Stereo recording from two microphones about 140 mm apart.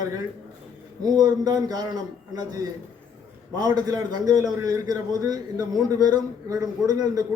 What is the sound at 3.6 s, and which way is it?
A man's voice, 25° right (ahead or behind).